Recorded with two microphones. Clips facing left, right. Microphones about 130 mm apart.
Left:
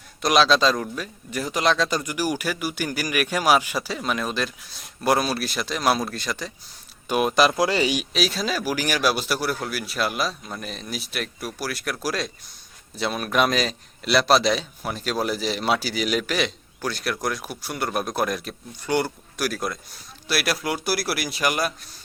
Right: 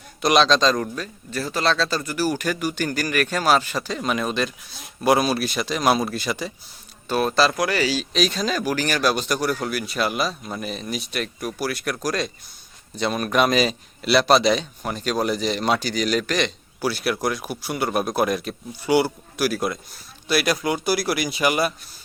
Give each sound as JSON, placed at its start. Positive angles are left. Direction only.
{"t": 0.2, "sound": "a man's voice", "side_deg": 0}
{"t": 7.1, "sound": "a man's voice", "side_deg": 15}
{"t": 8.1, "sound": "speech", "side_deg": 5}
{"t": 16.8, "sound": "speech", "side_deg": -5}